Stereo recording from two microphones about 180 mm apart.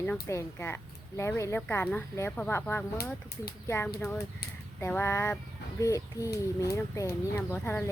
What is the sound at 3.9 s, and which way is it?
Speech, 10° left (ahead or behind).